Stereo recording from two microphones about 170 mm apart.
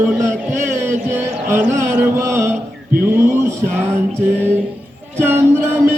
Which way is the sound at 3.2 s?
15° right (ahead or behind).